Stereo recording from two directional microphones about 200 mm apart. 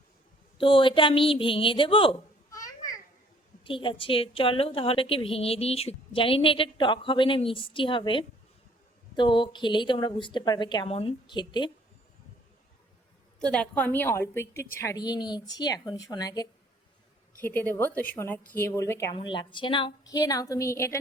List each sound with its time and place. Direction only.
0.6 s a woman's voice: 25° left (ahead or behind)
13.4 s a woman's voice: 5° left (ahead or behind)